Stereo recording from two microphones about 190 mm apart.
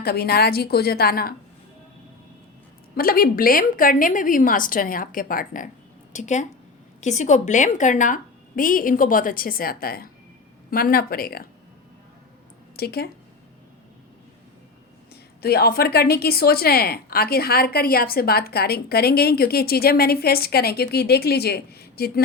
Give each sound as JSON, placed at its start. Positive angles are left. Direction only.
{"t": 0.0, "sound": "a woman's voice", "side_deg": 55}
{"t": 2.9, "sound": "a woman's voice", "side_deg": 50}
{"t": 12.7, "sound": "speech", "side_deg": 55}
{"t": 15.1, "sound": "a woman's voice", "side_deg": 55}